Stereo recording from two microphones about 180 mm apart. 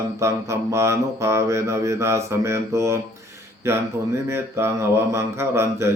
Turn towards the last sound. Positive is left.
turn(degrees=-15)  # may be behind; listen again after turning